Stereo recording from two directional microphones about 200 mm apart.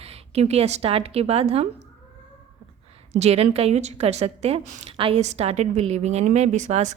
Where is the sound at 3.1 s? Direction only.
30° right (ahead or behind).